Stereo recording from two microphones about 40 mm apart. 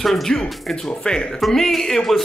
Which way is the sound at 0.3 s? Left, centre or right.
Centre.